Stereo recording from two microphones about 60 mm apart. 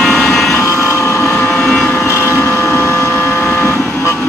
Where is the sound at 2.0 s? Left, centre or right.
Left.